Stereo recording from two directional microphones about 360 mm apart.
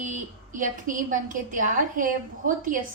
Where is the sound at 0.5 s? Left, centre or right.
Right.